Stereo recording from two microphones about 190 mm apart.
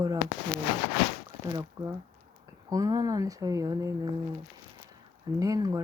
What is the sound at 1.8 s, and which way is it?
Speech, 20° right (ahead or behind).